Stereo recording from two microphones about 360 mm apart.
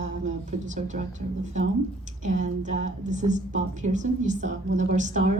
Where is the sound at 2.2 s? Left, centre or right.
Centre.